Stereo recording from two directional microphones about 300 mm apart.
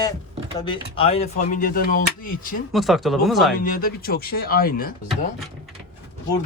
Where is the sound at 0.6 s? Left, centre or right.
Centre.